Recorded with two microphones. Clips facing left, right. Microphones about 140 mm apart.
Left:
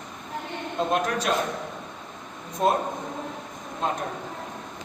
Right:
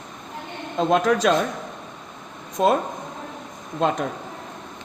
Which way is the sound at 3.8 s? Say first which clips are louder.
Right 6 dB; 90° right.